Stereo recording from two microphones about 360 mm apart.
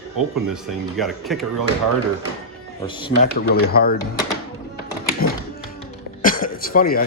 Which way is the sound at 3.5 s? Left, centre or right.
Left.